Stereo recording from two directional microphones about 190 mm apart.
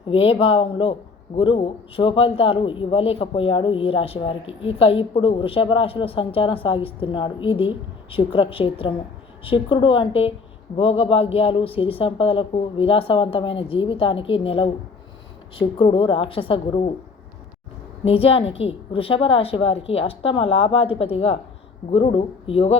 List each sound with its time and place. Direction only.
0.1 s a man's voice: 30° left (ahead or behind)
18.0 s a woman's voice: 30° left (ahead or behind)